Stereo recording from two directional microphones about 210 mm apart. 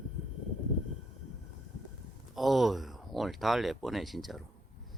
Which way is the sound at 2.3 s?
Centre (ahead or behind).